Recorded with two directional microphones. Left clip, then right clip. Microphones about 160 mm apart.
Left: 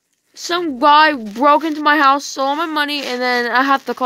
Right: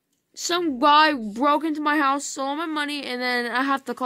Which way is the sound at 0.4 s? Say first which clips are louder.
Left 5 dB; 5° left (ahead or behind).